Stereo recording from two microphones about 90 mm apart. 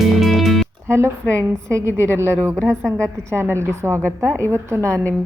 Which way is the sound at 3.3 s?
30° right (ahead or behind).